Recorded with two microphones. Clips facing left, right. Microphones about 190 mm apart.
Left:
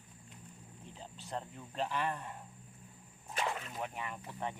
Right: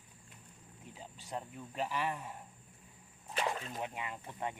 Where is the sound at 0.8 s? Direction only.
10° right (ahead or behind).